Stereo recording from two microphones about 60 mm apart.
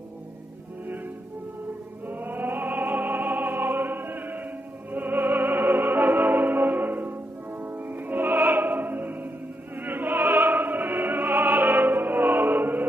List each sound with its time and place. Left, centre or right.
2.0 s opera: right
4.9 s music: right
9.8 s opera: right